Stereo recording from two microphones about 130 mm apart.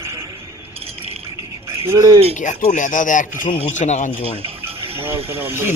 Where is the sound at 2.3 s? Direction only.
70° left (ahead or behind).